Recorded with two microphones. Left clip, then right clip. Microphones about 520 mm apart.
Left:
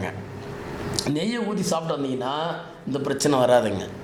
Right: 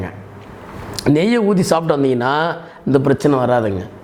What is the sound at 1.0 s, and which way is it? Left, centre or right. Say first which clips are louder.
A man's voice: right 15 dB; right.